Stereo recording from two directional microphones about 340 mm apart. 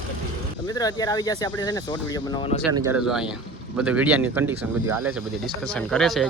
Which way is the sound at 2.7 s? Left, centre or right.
Centre.